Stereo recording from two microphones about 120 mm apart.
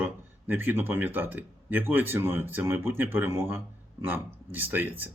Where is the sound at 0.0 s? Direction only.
15° right (ahead or behind).